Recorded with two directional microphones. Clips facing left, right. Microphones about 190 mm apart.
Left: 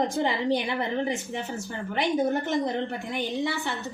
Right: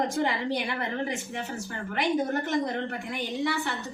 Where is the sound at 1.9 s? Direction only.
20° left (ahead or behind).